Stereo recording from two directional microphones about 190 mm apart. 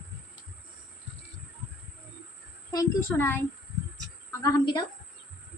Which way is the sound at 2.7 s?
15° left (ahead or behind).